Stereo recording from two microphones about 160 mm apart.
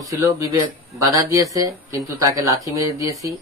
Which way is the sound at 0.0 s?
20° right (ahead or behind).